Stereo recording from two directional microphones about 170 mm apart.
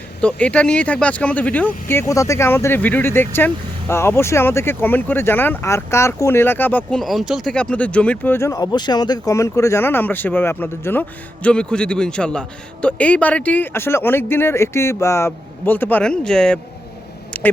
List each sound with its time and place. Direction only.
0.2 s speech: 5° left (ahead or behind)
7.0 s speech: centre (ahead or behind)
17.3 s quack: 10° left (ahead or behind)